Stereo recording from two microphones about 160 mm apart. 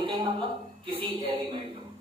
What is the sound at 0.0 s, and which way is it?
A woman's voice, 30° right (ahead or behind).